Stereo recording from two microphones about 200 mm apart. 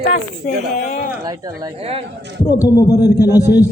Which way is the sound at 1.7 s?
30° right (ahead or behind).